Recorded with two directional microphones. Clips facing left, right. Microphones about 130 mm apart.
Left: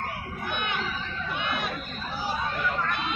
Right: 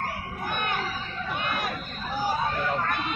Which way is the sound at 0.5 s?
40° right (ahead or behind).